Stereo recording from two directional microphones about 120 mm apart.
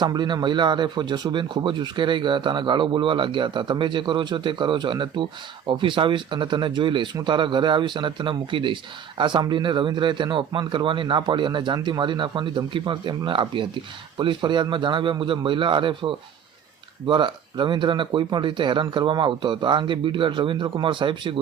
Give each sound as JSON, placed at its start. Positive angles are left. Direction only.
{"t": 0.0, "sound": "speech", "side_deg": -40}